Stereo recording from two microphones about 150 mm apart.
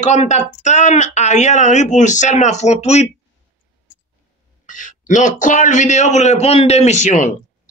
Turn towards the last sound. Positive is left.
turn(degrees=55)  # may be behind; listen again after turning